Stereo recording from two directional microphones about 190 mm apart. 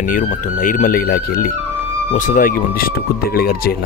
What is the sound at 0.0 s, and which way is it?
Speech, 45° left (ahead or behind).